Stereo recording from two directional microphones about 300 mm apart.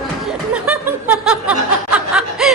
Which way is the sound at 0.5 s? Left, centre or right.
Centre.